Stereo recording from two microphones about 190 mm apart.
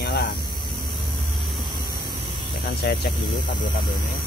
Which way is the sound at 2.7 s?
55° left (ahead or behind).